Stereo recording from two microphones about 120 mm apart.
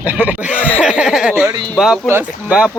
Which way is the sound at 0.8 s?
5° right (ahead or behind).